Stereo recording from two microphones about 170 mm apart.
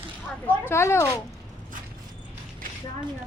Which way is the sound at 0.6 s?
15° left (ahead or behind).